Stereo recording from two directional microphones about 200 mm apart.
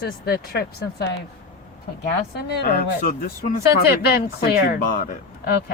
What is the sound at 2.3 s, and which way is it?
Speech, 55° left (ahead or behind).